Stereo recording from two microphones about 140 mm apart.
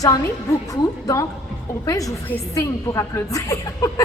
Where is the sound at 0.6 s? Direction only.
25° left (ahead or behind).